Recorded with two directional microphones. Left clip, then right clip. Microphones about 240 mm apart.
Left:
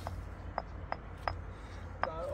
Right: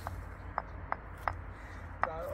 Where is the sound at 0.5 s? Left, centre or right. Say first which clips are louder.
Right 2 dB; centre.